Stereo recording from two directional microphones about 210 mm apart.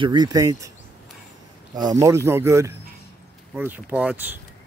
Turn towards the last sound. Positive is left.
turn(degrees=-5)  # may be behind; listen again after turning